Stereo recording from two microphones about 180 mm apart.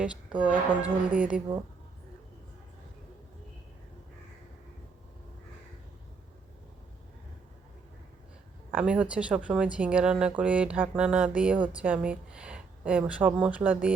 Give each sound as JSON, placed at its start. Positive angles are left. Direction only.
{"t": 0.0, "sound": "speech", "side_deg": -5}
{"t": 8.7, "sound": "a woman's voice", "side_deg": -5}